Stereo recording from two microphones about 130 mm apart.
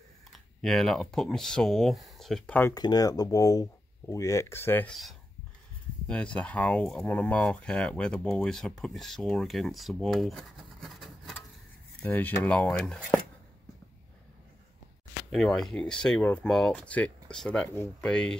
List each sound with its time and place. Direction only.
0.3 s speech: centre (ahead or behind)
2.7 s speech: 30° left (ahead or behind)
6.0 s speech: 10° left (ahead or behind)
12.0 s speech: 15° left (ahead or behind)
15.3 s speech: 5° left (ahead or behind)